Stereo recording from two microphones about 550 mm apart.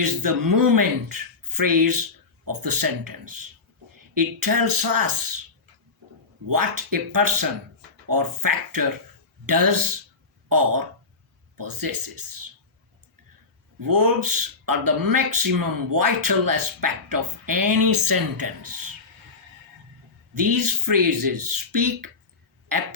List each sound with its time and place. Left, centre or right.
0.0 s speech: right
6.5 s speech: right
13.7 s speech: right
20.3 s speech: right